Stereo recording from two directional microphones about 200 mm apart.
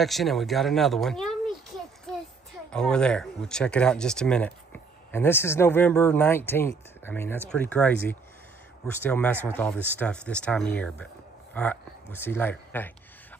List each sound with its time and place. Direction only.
0.0 s speech: centre (ahead or behind)
2.7 s speech: 5° left (ahead or behind)